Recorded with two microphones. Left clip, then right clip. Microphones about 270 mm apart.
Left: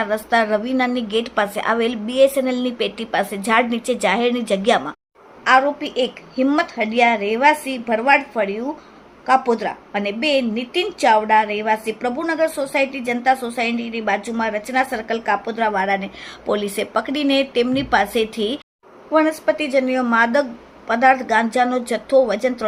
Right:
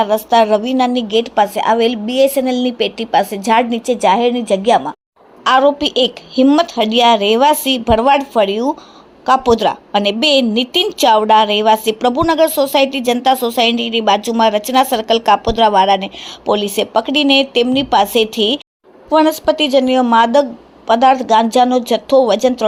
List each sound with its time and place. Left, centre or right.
0.0 s a woman's voice: centre
5.5 s a woman's voice: right
10.5 s a woman's voice: centre
10.9 s a woman's voice: right